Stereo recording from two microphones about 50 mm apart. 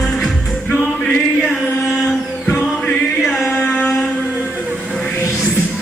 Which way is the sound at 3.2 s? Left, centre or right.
Centre.